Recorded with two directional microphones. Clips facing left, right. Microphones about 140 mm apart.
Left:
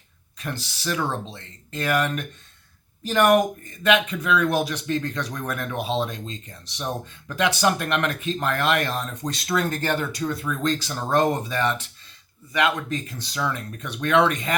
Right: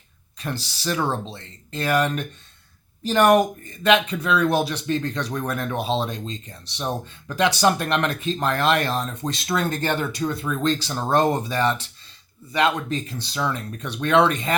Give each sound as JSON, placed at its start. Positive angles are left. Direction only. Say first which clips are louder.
{"t": 0.3, "sound": "speech", "louder": "right 2 dB", "side_deg": -30}